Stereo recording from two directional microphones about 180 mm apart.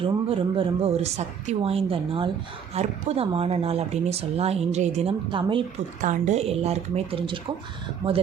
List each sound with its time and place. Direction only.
0.0 s speech: 30° right (ahead or behind)
6.0 s speech: 45° right (ahead or behind)